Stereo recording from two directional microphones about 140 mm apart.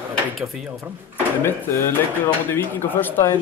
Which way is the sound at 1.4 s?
20° left (ahead or behind).